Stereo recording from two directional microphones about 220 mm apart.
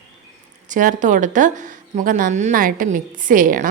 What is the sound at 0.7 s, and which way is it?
A woman's voice, 35° right (ahead or behind).